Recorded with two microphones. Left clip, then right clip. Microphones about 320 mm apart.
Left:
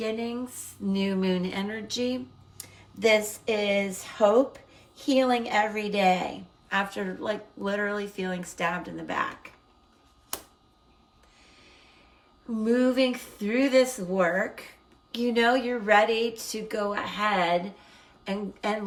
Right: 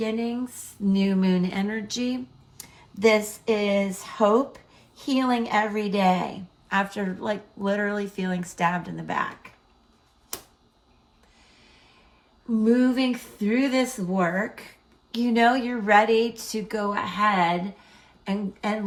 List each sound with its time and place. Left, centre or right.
0.0 s speech: centre
12.6 s speech: centre
17.9 s a sound: centre